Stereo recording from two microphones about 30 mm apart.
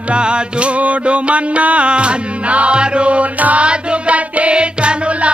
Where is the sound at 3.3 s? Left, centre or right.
Right.